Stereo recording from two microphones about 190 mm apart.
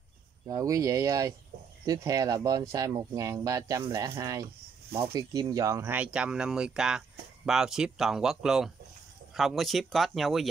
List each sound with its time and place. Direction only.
0.5 s speech: 15° right (ahead or behind); by 10.5 s centre (ahead or behind)